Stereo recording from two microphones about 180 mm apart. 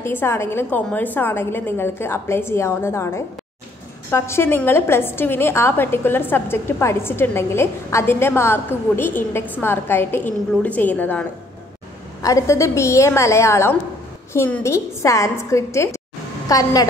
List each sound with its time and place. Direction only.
0.0 s a woman's voice: 15° left (ahead or behind)